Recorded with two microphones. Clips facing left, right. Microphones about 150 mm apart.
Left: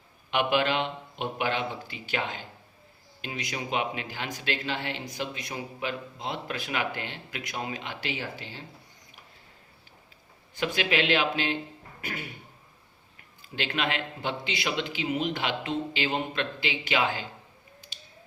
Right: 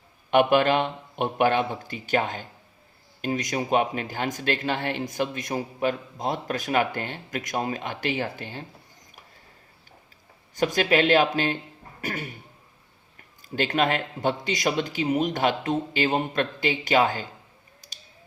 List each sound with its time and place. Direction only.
0.3 s speech: 50° right (ahead or behind)
10.5 s speech: 40° right (ahead or behind)
17.7 s finger snapping: 40° right (ahead or behind)